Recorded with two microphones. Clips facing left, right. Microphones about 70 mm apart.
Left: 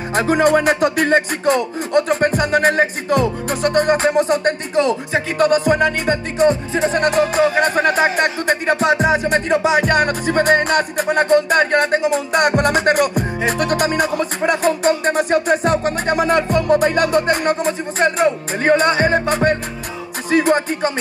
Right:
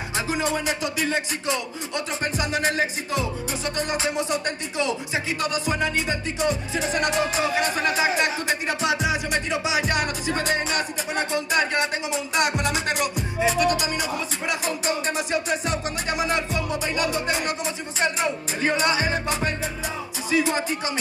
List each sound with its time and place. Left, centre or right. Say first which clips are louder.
0.1 s music: left 12 dB; left